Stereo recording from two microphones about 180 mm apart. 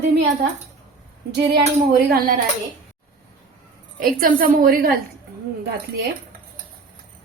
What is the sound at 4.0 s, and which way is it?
Speech, 50° right (ahead or behind).